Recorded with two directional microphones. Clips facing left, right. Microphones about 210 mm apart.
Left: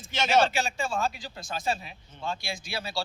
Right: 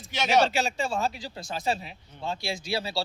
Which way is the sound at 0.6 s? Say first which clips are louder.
Right 2 dB; 30° right (ahead or behind).